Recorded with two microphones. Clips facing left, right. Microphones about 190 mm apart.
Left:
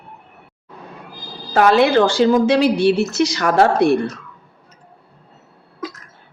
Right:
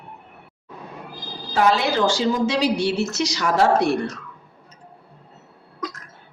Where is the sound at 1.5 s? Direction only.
60° left (ahead or behind).